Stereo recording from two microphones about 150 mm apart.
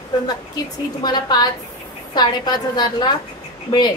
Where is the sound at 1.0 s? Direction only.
30° left (ahead or behind).